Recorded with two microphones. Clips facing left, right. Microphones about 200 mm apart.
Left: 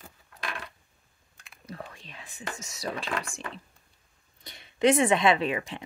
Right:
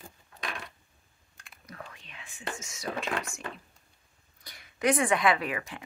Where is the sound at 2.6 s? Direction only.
35° left (ahead or behind).